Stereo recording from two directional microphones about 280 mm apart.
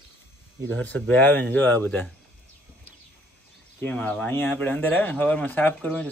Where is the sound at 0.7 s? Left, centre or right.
Centre.